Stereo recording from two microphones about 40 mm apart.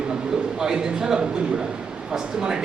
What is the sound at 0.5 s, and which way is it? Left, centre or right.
Speech, centre.